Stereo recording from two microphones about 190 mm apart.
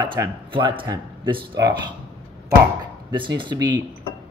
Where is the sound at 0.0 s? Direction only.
25° right (ahead or behind).